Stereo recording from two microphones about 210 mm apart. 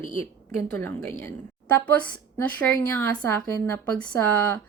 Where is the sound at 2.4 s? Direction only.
10° left (ahead or behind).